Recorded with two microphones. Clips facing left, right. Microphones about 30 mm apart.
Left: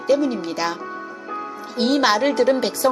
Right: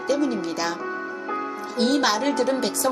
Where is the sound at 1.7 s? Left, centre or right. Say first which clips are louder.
Left 3 dB; centre.